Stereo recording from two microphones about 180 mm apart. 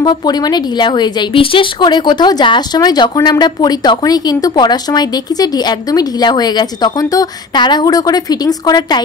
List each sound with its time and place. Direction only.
0.0 s speech: 25° left (ahead or behind)